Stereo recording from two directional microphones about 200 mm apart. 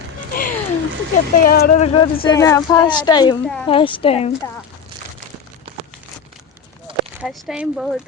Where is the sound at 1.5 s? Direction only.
45° left (ahead or behind).